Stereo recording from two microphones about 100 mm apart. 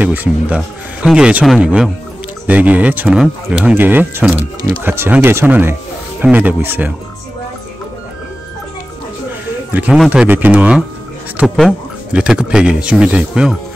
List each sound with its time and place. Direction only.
0.0 s speech: 15° right (ahead or behind)
3.2 s speech: 5° right (ahead or behind)
3.7 s speech: 20° right (ahead or behind)
9.7 s speech: 15° right (ahead or behind)
11.4 s speech: centre (ahead or behind)
12.1 s speech: 10° right (ahead or behind)